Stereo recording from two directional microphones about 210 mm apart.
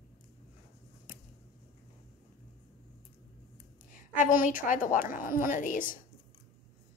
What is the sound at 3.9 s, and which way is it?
A woman's voice, 40° left (ahead or behind).